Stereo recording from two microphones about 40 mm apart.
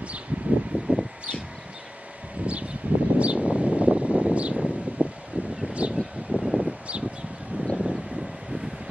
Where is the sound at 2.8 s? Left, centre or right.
Right.